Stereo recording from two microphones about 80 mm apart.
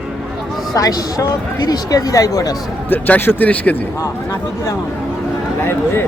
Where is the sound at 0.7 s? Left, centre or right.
Left.